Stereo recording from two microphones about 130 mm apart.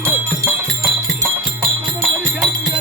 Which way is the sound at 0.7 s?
5° right (ahead or behind).